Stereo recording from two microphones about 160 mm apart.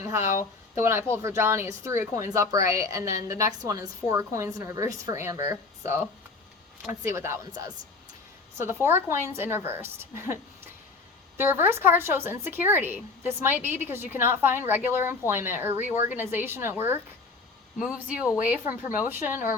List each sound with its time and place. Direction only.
0.0 s a woman's voice: 15° right (ahead or behind)